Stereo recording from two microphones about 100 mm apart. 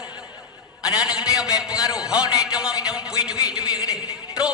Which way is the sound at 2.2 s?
40° left (ahead or behind).